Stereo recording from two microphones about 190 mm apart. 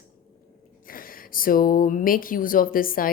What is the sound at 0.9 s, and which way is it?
Speech, 50° left (ahead or behind).